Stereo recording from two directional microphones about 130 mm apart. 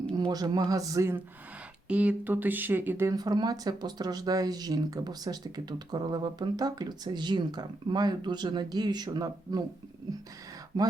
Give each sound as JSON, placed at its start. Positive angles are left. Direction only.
{"t": 0.1, "sound": "speech", "side_deg": -35}
{"t": 1.9, "sound": "speech", "side_deg": -10}
{"t": 3.2, "sound": "speech", "side_deg": -30}
{"t": 10.7, "sound": "speech", "side_deg": -30}